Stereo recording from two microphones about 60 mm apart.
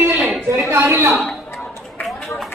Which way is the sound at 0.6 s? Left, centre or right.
Right.